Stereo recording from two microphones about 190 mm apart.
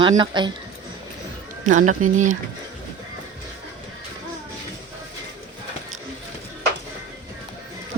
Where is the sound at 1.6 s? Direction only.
40° right (ahead or behind).